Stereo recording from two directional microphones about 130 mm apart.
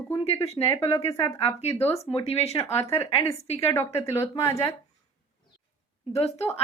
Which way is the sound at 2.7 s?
20° left (ahead or behind).